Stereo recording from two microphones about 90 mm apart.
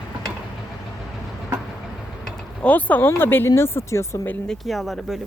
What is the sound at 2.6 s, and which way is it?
Speech, 15° left (ahead or behind).